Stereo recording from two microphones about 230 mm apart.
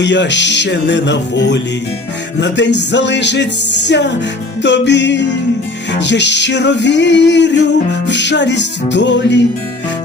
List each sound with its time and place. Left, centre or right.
0.0 s music: left